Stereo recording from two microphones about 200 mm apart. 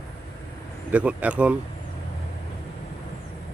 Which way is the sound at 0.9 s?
5° right (ahead or behind).